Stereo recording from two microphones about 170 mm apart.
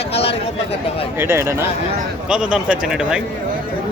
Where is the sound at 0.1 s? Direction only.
35° left (ahead or behind).